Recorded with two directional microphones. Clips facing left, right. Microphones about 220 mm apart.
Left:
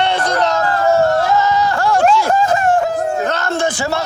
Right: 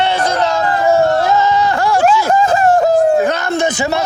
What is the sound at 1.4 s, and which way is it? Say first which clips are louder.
Music: right 2 dB; 25° right (ahead or behind).